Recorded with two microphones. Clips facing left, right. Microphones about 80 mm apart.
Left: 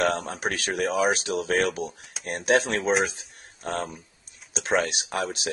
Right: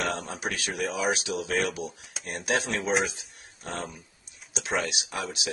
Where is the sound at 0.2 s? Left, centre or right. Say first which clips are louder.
Left 3 dB; left.